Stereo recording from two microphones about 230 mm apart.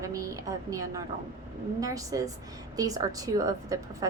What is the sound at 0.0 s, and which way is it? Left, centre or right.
A woman's voice, centre.